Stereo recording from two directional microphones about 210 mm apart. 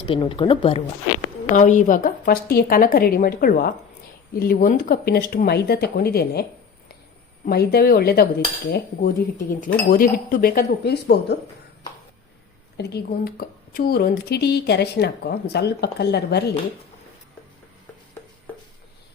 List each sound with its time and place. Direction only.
0.0 s speech: 25° left (ahead or behind)
1.5 s speech: 35° left (ahead or behind)
7.4 s speech: 50° left (ahead or behind)
12.7 s speech: 50° left (ahead or behind)